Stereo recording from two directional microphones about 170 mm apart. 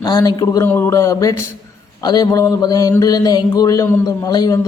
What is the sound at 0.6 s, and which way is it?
Speech, 15° left (ahead or behind).